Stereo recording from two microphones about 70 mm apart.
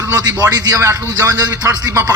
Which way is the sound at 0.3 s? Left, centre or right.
Right.